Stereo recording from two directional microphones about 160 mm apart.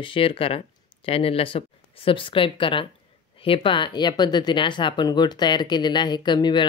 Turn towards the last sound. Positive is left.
turn(degrees=30)  # may be behind; listen again after turning